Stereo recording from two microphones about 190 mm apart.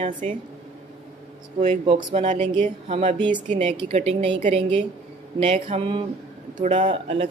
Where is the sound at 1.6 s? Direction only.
35° right (ahead or behind).